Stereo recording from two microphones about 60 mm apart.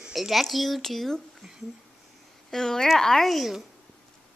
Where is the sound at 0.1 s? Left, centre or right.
Centre.